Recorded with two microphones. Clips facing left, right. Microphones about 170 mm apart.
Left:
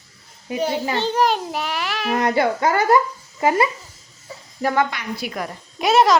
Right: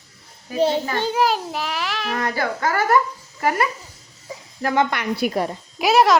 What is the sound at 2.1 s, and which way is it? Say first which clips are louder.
Speech: left 7 dB; 20° left (ahead or behind).